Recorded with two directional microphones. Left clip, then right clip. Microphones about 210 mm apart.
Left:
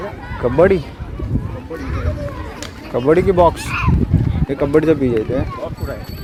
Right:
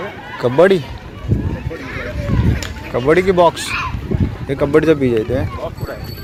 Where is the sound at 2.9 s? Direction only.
10° left (ahead or behind).